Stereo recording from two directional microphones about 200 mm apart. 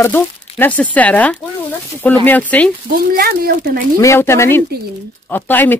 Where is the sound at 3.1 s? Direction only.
50° right (ahead or behind).